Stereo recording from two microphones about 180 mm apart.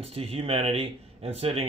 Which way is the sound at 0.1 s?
30° right (ahead or behind).